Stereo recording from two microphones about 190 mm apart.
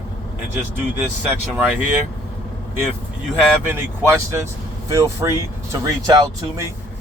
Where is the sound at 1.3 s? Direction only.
10° right (ahead or behind).